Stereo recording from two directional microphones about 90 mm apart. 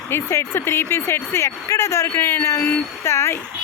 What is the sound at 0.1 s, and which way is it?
Speech, 30° left (ahead or behind).